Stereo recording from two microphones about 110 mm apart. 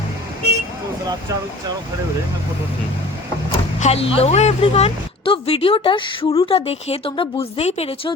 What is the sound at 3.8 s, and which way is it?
Speech, 70° left (ahead or behind).